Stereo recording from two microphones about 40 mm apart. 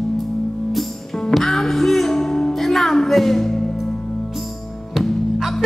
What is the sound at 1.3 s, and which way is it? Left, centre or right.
Music, centre.